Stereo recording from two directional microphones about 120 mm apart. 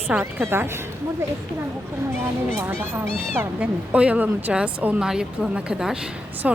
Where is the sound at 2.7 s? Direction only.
20° right (ahead or behind).